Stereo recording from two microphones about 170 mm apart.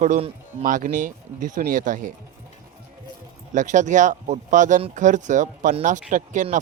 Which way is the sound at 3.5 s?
45° right (ahead or behind).